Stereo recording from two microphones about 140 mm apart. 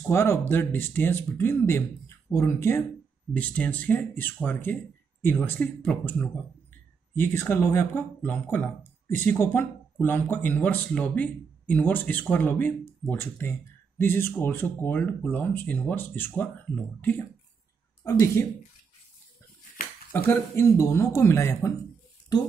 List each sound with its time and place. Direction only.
0.1 s speech: 20° left (ahead or behind)
18.0 s speech: 20° left (ahead or behind)
20.1 s speech: 15° left (ahead or behind)